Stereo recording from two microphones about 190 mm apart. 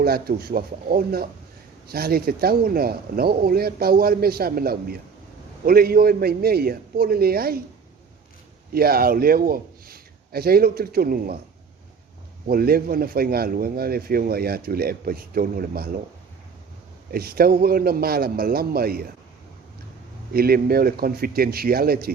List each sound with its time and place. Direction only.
0.0 s speech: 55° right (ahead or behind)
8.7 s a man's voice: 50° right (ahead or behind)
12.5 s speech: 50° right (ahead or behind)
17.1 s speech: 55° right (ahead or behind)
20.3 s speech: 50° right (ahead or behind)